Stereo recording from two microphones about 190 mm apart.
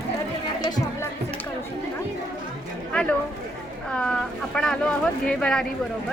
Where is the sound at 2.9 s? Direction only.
5° left (ahead or behind).